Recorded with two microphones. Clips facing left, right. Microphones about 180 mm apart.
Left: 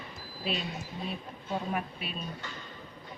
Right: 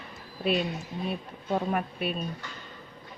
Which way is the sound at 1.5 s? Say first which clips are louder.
Right 5 dB; 55° right (ahead or behind).